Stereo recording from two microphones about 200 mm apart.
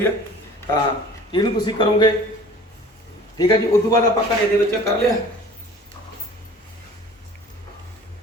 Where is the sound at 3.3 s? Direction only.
20° left (ahead or behind).